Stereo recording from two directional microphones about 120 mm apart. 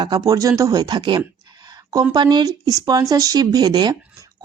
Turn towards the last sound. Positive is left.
turn(degrees=-35)  # may be behind; listen again after turning